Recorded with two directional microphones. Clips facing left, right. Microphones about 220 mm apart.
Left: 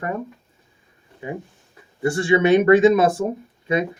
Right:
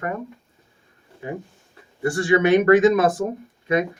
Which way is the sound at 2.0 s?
25° left (ahead or behind).